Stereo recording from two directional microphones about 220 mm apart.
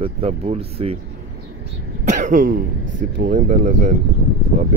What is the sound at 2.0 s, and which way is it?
Speech, 35° right (ahead or behind).